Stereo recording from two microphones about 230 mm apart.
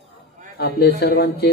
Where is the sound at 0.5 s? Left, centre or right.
Left.